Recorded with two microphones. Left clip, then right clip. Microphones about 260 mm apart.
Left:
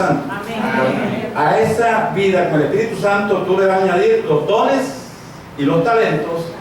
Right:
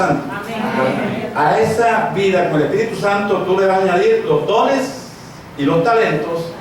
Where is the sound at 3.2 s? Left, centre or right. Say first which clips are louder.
Even; left.